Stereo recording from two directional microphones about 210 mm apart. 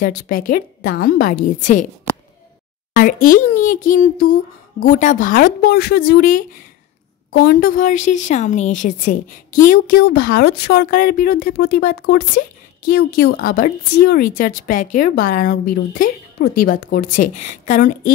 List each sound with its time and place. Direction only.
0.0 s a child's voice: 40° left (ahead or behind)
2.9 s a child's voice: 40° left (ahead or behind)